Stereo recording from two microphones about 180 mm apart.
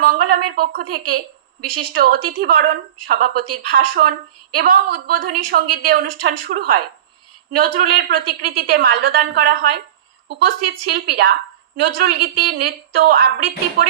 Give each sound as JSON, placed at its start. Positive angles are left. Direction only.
{"t": 0.0, "sound": "a woman's voice", "side_deg": -55}